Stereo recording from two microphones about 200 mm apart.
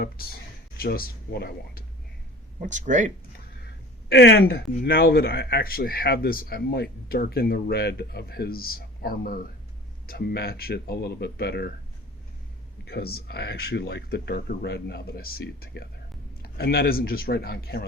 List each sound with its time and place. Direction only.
0.0 s speech: 50° left (ahead or behind)
2.6 s speech: 40° right (ahead or behind)
4.1 s speech: 60° left (ahead or behind)
12.8 s speech: 50° left (ahead or behind)